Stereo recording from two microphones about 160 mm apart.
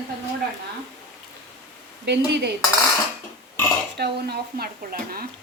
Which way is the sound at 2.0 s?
90° right.